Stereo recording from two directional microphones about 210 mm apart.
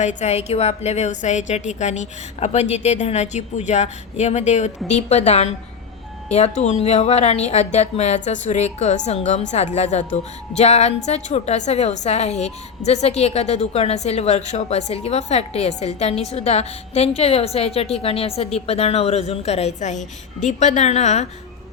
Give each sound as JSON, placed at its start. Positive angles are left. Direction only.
{"t": 0.0, "sound": "a woman's voice", "side_deg": 35}